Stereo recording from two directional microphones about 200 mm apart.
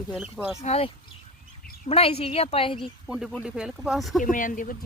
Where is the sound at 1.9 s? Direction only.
30° left (ahead or behind).